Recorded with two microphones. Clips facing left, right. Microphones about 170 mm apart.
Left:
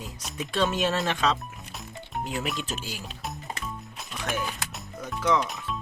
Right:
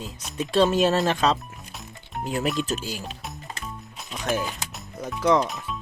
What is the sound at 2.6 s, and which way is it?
Speech, 40° right (ahead or behind).